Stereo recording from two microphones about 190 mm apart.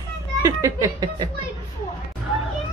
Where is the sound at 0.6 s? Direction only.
15° right (ahead or behind).